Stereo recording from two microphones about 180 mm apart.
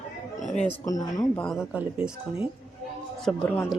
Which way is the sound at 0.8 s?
20° left (ahead or behind).